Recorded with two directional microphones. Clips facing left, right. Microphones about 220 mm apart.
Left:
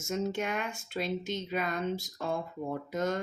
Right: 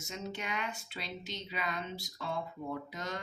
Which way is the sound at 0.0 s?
50° left (ahead or behind).